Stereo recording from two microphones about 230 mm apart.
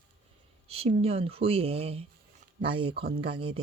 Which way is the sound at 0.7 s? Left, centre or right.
Right.